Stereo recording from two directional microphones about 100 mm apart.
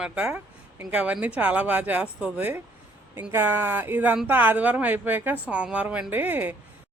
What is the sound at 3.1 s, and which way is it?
Speech, 25° right (ahead or behind).